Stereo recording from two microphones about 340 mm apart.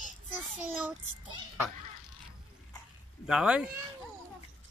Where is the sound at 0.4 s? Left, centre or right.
Centre.